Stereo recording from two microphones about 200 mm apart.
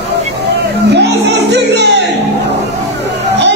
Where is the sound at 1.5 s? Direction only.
60° right (ahead or behind).